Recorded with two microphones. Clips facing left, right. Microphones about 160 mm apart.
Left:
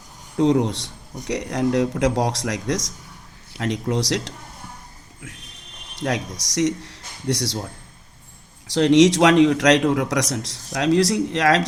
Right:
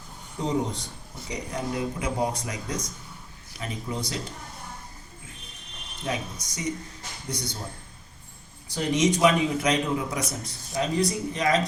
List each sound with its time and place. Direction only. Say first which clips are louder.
0.3 s a man's voice: left 9 dB; 75° left (ahead or behind)
6.0 s speech: left 6 dB; 85° left
8.6 s a man's voice: left 10 dB; 85° left